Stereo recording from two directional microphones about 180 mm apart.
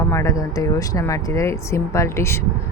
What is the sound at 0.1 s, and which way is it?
Speech, 15° left (ahead or behind).